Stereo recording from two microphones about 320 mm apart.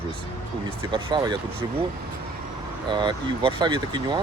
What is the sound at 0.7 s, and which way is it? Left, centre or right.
Speech, centre.